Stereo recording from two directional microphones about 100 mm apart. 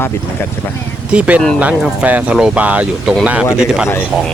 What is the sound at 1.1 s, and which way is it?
Speech, 15° right (ahead or behind).